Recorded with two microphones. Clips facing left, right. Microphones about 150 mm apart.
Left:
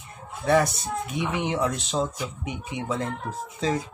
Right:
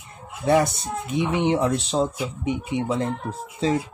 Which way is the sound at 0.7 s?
25° right (ahead or behind).